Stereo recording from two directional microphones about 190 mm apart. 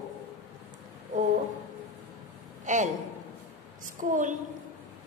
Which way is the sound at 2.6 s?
40° right (ahead or behind).